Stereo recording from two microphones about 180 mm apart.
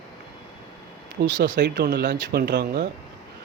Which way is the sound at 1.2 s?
60° right (ahead or behind).